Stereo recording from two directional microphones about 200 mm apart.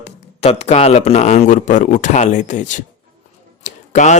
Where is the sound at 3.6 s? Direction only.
35° left (ahead or behind).